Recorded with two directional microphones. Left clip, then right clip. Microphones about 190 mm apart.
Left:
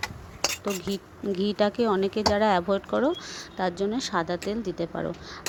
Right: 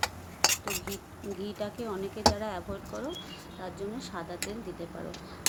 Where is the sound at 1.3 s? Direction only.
45° left (ahead or behind).